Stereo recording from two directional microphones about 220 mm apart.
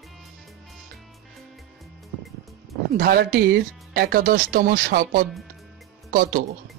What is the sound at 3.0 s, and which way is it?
Speech, 45° right (ahead or behind).